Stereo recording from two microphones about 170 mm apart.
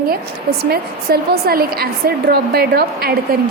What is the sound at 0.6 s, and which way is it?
A woman's voice, 65° right (ahead or behind).